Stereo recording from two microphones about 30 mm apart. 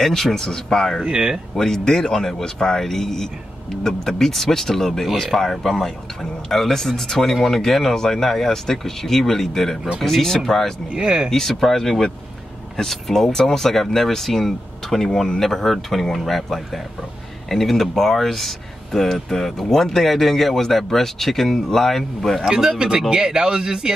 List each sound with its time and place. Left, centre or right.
0.0 s speech: centre
1.0 s speech: right
1.5 s speech: centre
7.2 s speech: centre
7.4 s speech: centre
11.0 s speech: right
11.2 s speech: centre
22.4 s speech: right